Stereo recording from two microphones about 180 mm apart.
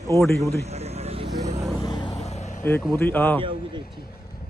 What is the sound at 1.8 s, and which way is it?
Vehicle, 25° left (ahead or behind).